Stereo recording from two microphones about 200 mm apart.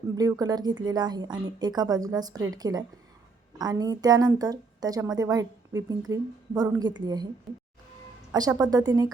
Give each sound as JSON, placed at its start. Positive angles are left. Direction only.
{"t": 0.2, "sound": "a woman's voice", "side_deg": -20}
{"t": 8.3, "sound": "a woman's voice", "side_deg": -20}